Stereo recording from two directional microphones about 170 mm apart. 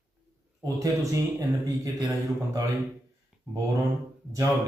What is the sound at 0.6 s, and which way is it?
A man's voice, 20° right (ahead or behind).